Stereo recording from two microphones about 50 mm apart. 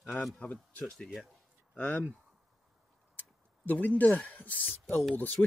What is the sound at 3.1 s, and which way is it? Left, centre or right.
Speech, left.